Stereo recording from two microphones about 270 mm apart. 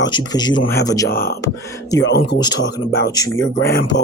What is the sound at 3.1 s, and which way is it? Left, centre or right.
Speech, centre.